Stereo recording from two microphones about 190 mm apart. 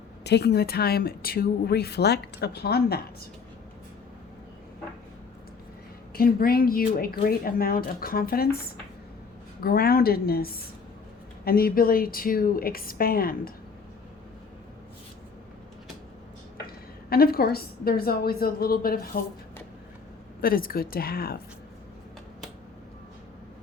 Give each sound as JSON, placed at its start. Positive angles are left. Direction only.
{"t": 0.3, "sound": "a woman's voice", "side_deg": 60}
{"t": 6.1, "sound": "speech", "side_deg": 50}
{"t": 16.6, "sound": "a woman's voice", "side_deg": 50}
{"t": 20.4, "sound": "speech", "side_deg": 50}